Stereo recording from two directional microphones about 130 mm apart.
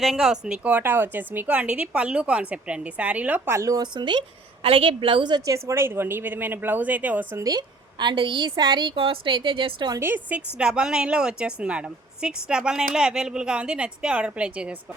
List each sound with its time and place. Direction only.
0.0 s a woman's voice: centre (ahead or behind)
7.4 s a woman's voice: 35° right (ahead or behind)
9.9 s a woman's voice: 15° right (ahead or behind)